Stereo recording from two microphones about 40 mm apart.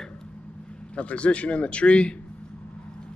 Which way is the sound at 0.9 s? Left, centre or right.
Left.